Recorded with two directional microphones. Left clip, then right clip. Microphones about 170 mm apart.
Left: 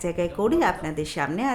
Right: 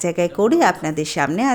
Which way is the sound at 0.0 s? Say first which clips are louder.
Right 6 dB; 50° right (ahead or behind).